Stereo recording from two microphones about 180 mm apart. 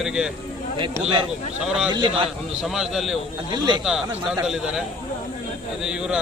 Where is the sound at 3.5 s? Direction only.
25° right (ahead or behind).